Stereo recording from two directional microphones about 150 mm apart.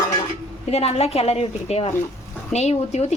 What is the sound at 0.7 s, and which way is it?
A woman's voice, 45° left (ahead or behind).